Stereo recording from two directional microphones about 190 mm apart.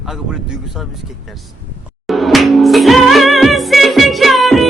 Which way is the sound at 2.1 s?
Centre (ahead or behind).